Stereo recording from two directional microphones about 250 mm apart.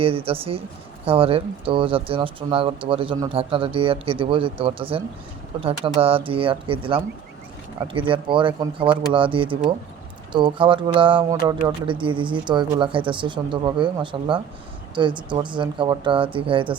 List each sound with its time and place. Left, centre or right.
0.0 s speech: right